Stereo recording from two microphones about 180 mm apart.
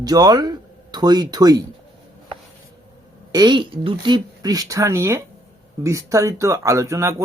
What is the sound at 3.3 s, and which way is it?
Speech, 20° right (ahead or behind).